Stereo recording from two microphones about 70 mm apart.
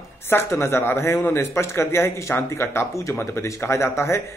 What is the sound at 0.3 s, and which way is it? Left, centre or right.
A man's voice, left.